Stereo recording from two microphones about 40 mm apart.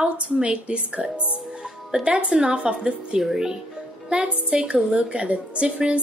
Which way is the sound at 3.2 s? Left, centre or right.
Centre.